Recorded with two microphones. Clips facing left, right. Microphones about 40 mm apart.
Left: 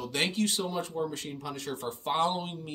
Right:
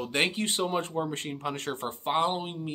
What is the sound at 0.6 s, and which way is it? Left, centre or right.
Speech, right.